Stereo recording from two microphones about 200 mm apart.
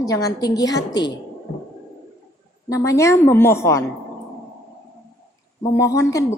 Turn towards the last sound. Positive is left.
turn(degrees=15)  # may be behind; listen again after turning